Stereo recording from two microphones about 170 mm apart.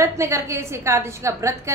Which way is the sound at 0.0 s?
15° right (ahead or behind).